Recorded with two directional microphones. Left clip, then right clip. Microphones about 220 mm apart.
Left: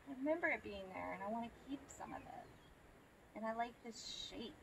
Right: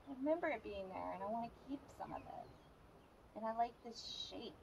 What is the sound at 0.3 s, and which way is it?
A woman's voice, 20° left (ahead or behind).